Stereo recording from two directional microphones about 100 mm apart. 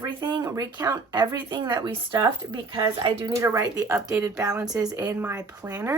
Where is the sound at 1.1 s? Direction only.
45° right (ahead or behind).